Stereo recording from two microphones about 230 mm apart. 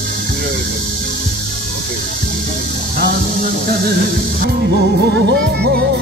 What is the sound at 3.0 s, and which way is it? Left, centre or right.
Music, right.